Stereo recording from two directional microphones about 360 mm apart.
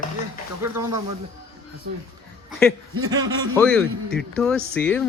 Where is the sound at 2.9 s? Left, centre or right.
Right.